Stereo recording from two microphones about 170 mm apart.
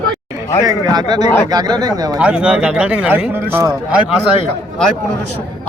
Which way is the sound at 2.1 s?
5° right (ahead or behind).